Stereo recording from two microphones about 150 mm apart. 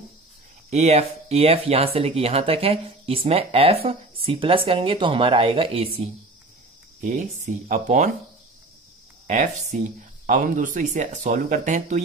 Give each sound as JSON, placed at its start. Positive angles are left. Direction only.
{"t": 0.7, "sound": "speech", "side_deg": -45}
{"t": 7.0, "sound": "speech", "side_deg": -55}
{"t": 9.3, "sound": "speech", "side_deg": -50}